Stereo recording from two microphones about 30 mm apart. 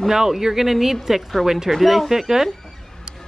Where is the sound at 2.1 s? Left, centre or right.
Centre.